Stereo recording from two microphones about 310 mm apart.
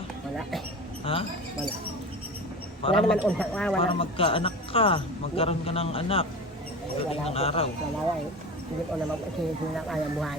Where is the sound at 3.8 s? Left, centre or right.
Centre.